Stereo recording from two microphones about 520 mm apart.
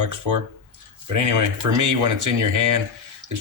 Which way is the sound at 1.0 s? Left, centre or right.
Right.